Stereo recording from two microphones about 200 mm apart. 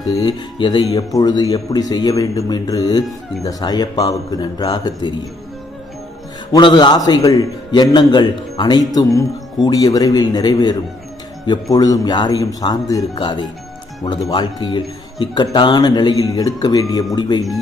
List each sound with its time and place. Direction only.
0.0 s speech: 20° left (ahead or behind)
6.5 s speech: 20° left (ahead or behind)